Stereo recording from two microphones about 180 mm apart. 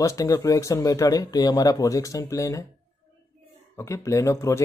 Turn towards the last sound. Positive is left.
turn(degrees=15)  # may be behind; listen again after turning